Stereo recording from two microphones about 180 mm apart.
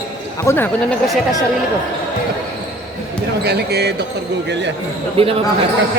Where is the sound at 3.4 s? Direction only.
65° right (ahead or behind).